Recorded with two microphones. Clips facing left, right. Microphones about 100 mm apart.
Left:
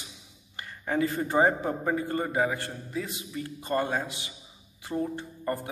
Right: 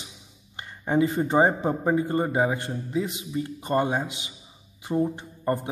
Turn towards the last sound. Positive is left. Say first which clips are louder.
# right 4 dB
turn(degrees=-25)  # may be behind; listen again after turning